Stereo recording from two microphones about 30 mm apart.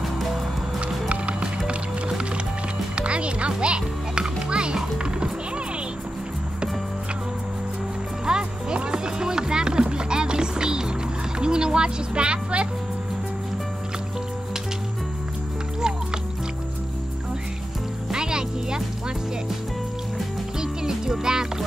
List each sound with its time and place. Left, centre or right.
1.0 s music: right
8.3 s music: right
18.1 s music: right
20.5 s music: right